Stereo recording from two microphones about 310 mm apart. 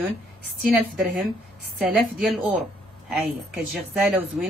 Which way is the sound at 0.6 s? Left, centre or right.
Centre.